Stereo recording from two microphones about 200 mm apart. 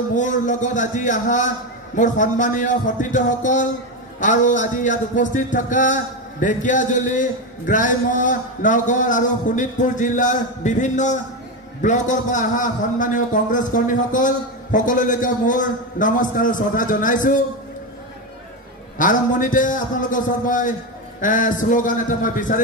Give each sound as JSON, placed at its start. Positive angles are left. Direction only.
{"t": 0.1, "sound": "a man's voice", "side_deg": 40}
{"t": 18.9, "sound": "a man's voice", "side_deg": 40}